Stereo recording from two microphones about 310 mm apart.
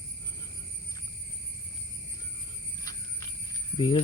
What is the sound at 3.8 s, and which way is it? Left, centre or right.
Speech, centre.